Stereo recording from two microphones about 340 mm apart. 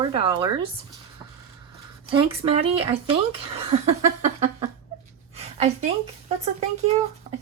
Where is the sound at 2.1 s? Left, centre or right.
Centre.